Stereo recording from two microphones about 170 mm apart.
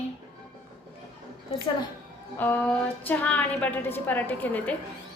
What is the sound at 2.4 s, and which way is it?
A woman's voice, 10° left (ahead or behind).